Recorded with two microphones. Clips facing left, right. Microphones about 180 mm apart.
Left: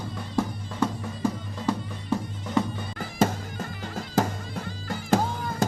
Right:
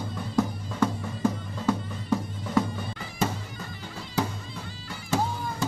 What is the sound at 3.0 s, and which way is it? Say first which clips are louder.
Music: left 6 dB; 45° left (ahead or behind).